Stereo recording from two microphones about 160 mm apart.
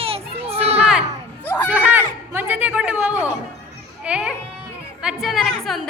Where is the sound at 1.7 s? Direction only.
10° right (ahead or behind).